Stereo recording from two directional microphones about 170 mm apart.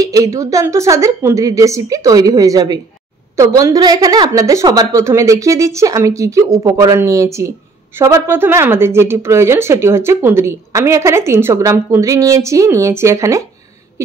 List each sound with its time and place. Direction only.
0.0 s a woman's voice: 20° right (ahead or behind)